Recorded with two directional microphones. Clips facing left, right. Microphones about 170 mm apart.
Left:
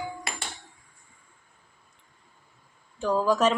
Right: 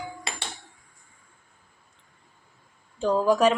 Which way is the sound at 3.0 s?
20° right (ahead or behind).